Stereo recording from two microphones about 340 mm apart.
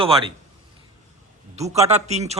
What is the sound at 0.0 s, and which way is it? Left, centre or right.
Speech, centre.